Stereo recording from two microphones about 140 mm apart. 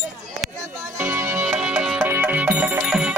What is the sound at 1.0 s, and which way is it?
Music, 15° right (ahead or behind).